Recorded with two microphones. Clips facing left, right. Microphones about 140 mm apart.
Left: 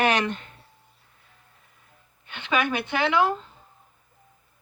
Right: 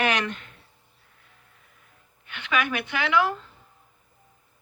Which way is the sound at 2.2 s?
30° left (ahead or behind).